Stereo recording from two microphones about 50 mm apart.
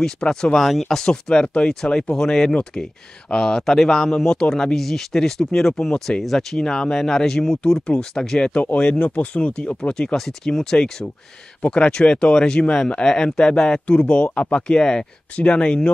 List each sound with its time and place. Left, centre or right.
0.0 s speech: centre
1.0 s speech: centre
8.7 s speech: left
11.6 s speech: left